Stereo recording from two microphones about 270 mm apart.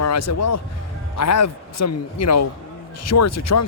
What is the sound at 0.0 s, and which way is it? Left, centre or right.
A man's voice, left.